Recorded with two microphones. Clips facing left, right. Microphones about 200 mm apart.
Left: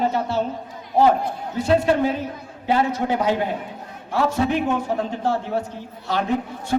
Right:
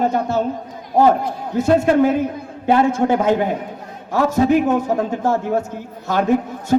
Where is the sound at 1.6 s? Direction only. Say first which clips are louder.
Right 4 dB; 45° right (ahead or behind).